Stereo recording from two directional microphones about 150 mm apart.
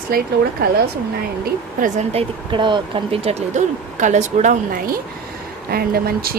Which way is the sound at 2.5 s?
30° right (ahead or behind).